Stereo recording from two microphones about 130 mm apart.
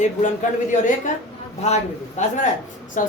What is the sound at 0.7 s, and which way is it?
A woman's voice, 70° left (ahead or behind).